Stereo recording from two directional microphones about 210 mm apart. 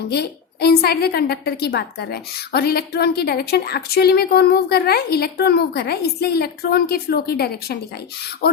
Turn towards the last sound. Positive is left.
turn(degrees=50)  # may be behind; listen again after turning